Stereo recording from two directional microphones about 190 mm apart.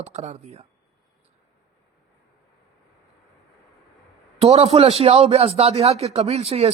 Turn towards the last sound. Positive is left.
turn(degrees=-30)  # may be behind; listen again after turning